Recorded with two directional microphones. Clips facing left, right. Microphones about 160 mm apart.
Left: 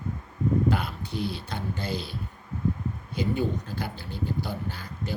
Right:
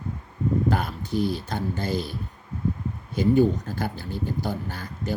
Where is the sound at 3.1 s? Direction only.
45° right (ahead or behind).